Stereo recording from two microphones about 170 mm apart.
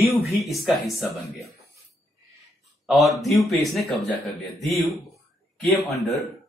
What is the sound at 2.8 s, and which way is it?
Speech, centre (ahead or behind).